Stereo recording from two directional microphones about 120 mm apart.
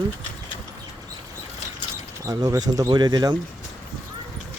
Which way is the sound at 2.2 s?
30° right (ahead or behind).